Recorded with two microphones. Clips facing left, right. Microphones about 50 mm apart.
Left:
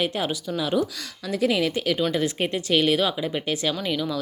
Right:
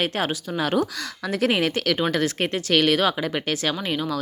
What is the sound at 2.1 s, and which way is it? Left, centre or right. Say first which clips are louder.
Speech: right 1 dB; right.